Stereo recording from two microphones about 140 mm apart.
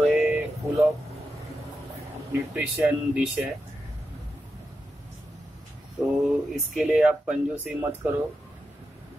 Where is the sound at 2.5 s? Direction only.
15° right (ahead or behind).